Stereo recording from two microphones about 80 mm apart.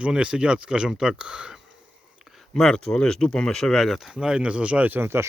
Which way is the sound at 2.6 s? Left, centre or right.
Centre.